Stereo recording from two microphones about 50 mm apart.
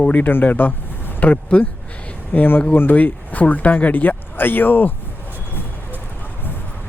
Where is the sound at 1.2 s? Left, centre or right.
Left.